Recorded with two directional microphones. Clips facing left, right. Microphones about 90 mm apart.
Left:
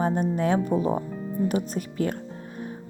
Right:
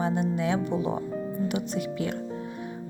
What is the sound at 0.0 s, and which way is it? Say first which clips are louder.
Speech: left 3 dB; 45° left (ahead or behind).